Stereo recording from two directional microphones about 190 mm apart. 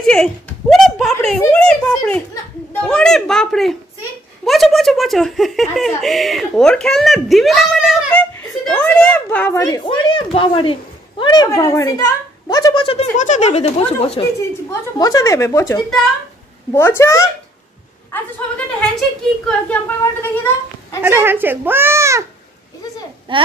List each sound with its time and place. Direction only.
0.0 s a sound: 5° left (ahead or behind)
4.5 s giggle: centre (ahead or behind)
9.8 s speech: 25° left (ahead or behind)
14.7 s a woman's voice: 20° left (ahead or behind)
19.4 s a woman's voice: 10° left (ahead or behind)
21.0 s speech: 10° right (ahead or behind)
23.3 s speech: 25° right (ahead or behind)